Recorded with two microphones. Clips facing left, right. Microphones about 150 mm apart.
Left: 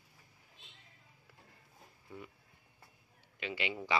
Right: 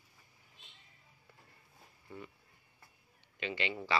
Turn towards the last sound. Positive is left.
turn(degrees=10)  # may be behind; listen again after turning